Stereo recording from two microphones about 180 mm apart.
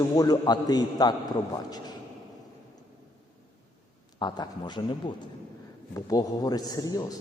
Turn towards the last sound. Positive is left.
turn(degrees=20)  # may be behind; listen again after turning